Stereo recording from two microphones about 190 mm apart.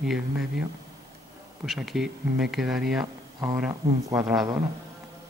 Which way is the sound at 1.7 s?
Centre (ahead or behind).